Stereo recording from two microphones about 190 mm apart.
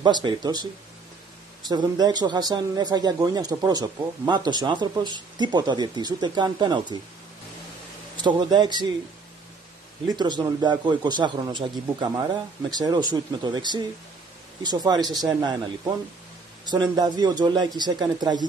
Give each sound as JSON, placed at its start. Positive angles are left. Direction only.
{"t": 0.0, "sound": "a man's voice", "side_deg": -25}
{"t": 1.7, "sound": "a man's voice", "side_deg": -20}
{"t": 8.2, "sound": "a man's voice", "side_deg": -25}
{"t": 10.0, "sound": "a man's voice", "side_deg": -25}
{"t": 16.6, "sound": "a man's voice", "side_deg": -20}